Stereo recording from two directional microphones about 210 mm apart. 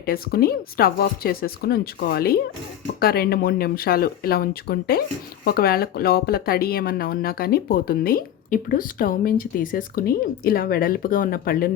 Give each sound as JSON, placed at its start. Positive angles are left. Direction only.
{"t": 0.0, "sound": "a woman's voice", "side_deg": 45}